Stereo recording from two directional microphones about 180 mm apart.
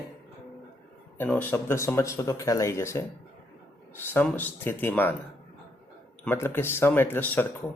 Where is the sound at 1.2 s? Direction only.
10° left (ahead or behind).